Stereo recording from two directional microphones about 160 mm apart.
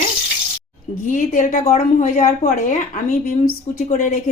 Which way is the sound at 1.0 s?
55° left (ahead or behind).